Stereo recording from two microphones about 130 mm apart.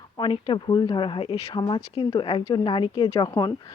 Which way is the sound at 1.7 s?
50° left (ahead or behind).